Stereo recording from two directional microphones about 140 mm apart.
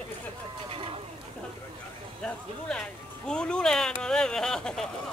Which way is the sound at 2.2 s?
10° left (ahead or behind).